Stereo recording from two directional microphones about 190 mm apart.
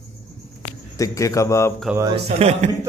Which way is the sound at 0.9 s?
15° left (ahead or behind).